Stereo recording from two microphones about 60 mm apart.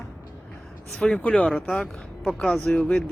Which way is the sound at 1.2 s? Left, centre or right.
Left.